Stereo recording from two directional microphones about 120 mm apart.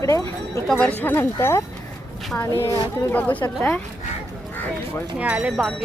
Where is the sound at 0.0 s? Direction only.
30° left (ahead or behind).